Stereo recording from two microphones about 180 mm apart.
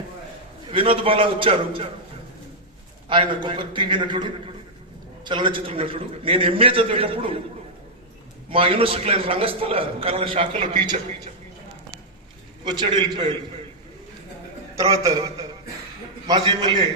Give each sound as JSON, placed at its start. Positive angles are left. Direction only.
{"t": 0.7, "sound": "a man's voice", "side_deg": -30}
{"t": 3.1, "sound": "a man's voice", "side_deg": -25}
{"t": 8.4, "sound": "a man's voice", "side_deg": -30}
{"t": 12.6, "sound": "a man's voice", "side_deg": -25}
{"t": 14.8, "sound": "a man's voice", "side_deg": -20}